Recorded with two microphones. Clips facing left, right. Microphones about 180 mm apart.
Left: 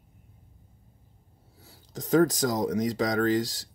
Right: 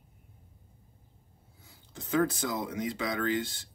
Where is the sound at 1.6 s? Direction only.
40° left (ahead or behind).